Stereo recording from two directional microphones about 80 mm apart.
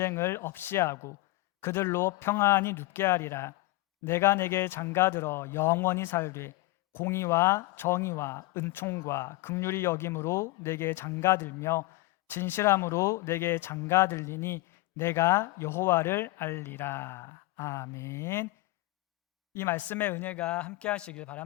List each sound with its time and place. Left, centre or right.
0.0 s speech: left
19.5 s a man's voice: left